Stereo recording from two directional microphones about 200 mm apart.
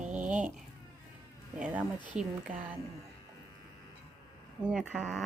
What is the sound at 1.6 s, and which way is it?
A woman's voice, 10° right (ahead or behind).